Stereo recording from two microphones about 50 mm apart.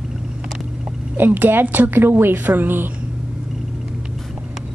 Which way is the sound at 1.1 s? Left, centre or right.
Right.